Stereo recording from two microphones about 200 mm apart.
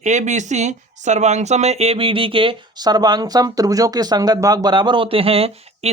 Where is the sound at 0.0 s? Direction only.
35° right (ahead or behind).